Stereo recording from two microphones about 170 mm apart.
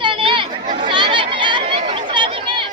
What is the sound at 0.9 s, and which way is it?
Chatter, 30° right (ahead or behind).